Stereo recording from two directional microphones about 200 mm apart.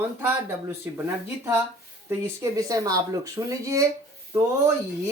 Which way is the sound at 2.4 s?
15° right (ahead or behind).